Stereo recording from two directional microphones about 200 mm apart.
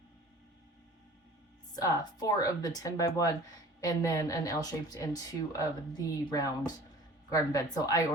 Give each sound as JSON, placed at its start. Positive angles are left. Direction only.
{"t": 1.7, "sound": "speech", "side_deg": 20}